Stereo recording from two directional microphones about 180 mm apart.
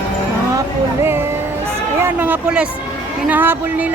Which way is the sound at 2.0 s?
10° right (ahead or behind).